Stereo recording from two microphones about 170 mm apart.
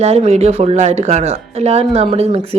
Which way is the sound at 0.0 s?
40° right (ahead or behind).